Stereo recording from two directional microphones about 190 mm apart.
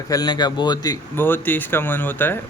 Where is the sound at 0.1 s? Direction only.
20° left (ahead or behind).